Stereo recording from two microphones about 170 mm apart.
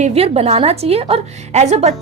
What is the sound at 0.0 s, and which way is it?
A woman's voice, 35° right (ahead or behind).